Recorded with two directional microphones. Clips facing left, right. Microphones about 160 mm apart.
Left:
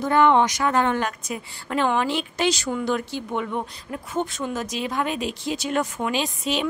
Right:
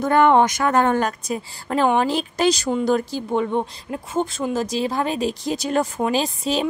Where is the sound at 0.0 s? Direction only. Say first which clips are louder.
Right 3 dB; 50° right (ahead or behind).